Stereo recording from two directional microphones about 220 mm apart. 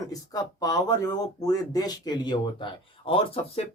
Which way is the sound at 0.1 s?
15° left (ahead or behind).